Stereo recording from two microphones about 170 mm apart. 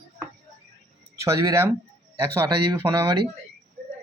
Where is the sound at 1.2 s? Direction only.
15° right (ahead or behind).